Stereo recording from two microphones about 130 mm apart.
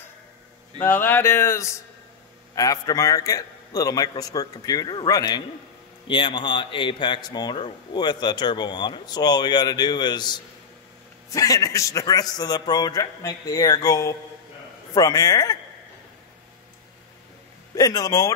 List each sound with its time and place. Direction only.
0.7 s a sound: 15° left (ahead or behind)
2.5 s a man's voice: 25° left (ahead or behind)
17.7 s a man's voice: 30° left (ahead or behind)